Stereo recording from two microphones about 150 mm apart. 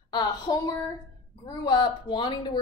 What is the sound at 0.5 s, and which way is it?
Speech, 25° left (ahead or behind).